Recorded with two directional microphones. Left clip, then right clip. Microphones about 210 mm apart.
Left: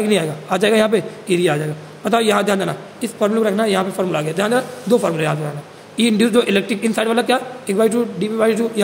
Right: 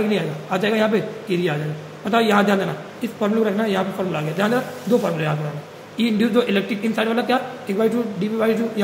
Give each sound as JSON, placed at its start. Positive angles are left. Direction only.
{"t": 0.1, "sound": "a man's voice", "side_deg": 50}